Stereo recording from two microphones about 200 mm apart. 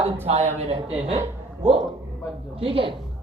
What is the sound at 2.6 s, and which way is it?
Speech, 25° right (ahead or behind).